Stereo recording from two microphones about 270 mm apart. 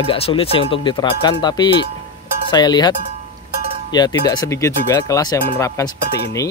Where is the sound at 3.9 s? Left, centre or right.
Centre.